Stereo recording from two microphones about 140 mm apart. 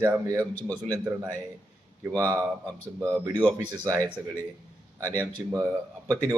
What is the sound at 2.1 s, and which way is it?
A man's voice, 25° right (ahead or behind).